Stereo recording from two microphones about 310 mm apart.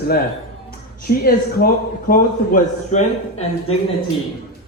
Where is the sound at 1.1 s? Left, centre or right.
Left.